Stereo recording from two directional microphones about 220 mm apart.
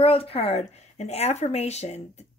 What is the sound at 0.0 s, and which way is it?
A woman's voice, 25° left (ahead or behind).